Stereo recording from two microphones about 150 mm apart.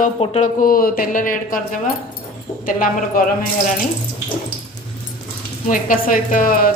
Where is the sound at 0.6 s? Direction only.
75° left (ahead or behind).